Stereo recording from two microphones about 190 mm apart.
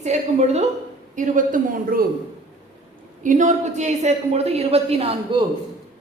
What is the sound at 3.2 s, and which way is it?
Speech, 40° right (ahead or behind).